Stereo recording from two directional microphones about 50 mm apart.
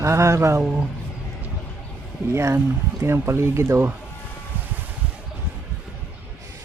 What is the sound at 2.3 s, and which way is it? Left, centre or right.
Speech, right.